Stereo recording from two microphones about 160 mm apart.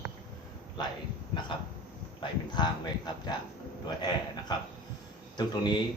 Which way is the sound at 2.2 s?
25° left (ahead or behind).